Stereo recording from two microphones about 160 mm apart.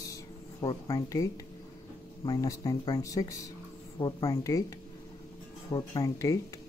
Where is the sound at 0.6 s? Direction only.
25° left (ahead or behind).